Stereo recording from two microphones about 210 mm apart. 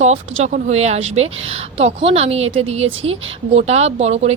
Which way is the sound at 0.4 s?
30° right (ahead or behind).